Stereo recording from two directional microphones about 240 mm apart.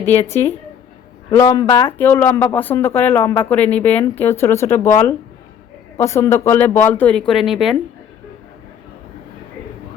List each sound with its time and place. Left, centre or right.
1.3 s speech: centre
6.0 s speech: centre